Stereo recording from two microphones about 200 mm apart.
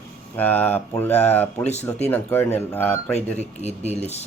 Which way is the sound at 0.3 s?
10° left (ahead or behind).